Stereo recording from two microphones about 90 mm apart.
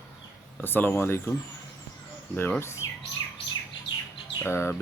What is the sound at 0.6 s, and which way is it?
Speech, 20° left (ahead or behind).